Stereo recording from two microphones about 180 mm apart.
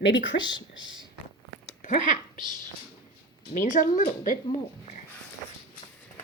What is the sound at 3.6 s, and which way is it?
Speech, 45° left (ahead or behind).